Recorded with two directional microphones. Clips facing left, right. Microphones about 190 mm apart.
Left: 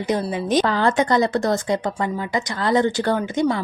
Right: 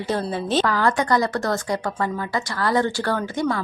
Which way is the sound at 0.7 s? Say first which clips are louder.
Left 2 dB; 25° left (ahead or behind).